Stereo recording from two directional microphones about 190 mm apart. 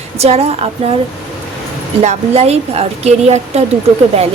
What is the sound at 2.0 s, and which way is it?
A woman's voice, 35° right (ahead or behind).